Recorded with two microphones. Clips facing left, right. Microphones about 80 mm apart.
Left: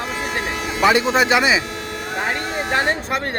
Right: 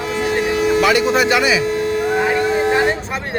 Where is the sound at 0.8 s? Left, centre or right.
Left.